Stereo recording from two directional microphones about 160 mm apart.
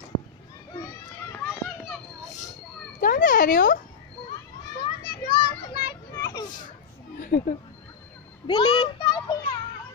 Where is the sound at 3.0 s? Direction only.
60° left (ahead or behind).